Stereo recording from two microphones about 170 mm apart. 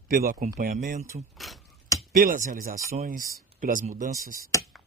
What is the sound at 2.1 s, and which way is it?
Speech, 50° right (ahead or behind).